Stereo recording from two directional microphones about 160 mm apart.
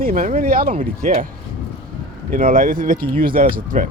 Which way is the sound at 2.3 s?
65° right (ahead or behind).